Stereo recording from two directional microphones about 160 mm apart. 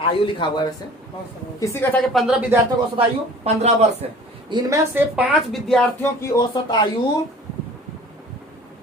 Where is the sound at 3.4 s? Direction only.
45° right (ahead or behind).